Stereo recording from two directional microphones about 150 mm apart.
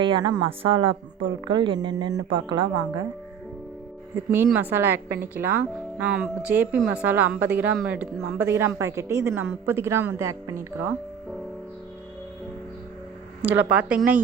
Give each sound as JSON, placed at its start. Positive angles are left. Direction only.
{"t": 0.0, "sound": "a woman's voice", "side_deg": -30}
{"t": 4.5, "sound": "a woman's voice", "side_deg": -15}
{"t": 13.4, "sound": "a woman's voice", "side_deg": -10}